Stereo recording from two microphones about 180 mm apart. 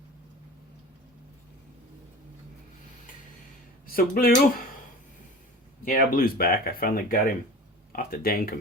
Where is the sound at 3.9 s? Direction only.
55° left (ahead or behind).